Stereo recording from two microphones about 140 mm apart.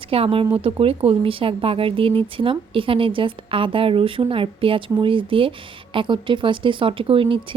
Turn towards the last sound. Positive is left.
turn(degrees=-40)  # may be behind; listen again after turning